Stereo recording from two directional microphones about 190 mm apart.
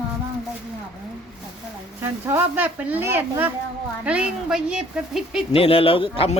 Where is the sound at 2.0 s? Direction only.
10° right (ahead or behind).